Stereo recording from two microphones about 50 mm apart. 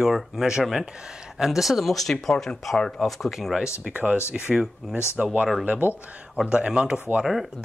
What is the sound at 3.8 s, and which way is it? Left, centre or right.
Speech, right.